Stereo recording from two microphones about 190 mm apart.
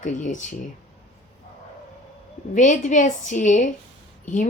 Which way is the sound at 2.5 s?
40° left (ahead or behind).